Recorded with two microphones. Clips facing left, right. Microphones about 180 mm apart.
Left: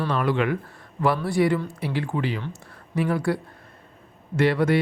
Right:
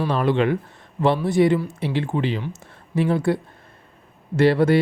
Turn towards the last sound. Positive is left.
turn(degrees=-30)  # may be behind; listen again after turning